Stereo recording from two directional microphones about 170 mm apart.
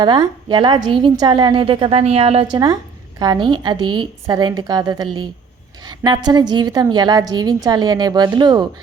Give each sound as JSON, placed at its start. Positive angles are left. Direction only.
{"t": 0.0, "sound": "a woman's voice", "side_deg": -25}